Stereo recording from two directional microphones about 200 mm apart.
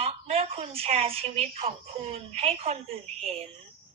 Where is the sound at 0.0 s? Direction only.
30° right (ahead or behind).